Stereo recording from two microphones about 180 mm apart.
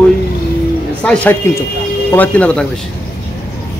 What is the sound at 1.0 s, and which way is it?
A man's voice, 5° left (ahead or behind).